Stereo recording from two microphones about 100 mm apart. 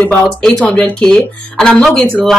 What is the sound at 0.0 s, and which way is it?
Speech, 10° left (ahead or behind).